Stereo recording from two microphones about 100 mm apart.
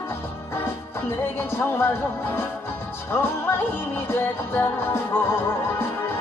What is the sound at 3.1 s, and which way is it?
Music, 25° left (ahead or behind).